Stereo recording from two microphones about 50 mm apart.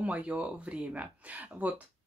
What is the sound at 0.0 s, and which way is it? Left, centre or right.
Speech, right.